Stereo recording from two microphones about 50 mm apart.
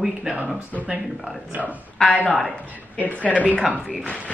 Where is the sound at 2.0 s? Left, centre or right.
Centre.